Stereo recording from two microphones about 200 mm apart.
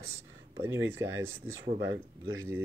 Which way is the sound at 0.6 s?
15° right (ahead or behind).